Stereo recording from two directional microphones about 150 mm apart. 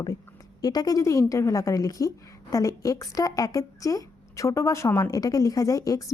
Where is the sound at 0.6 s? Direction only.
25° left (ahead or behind).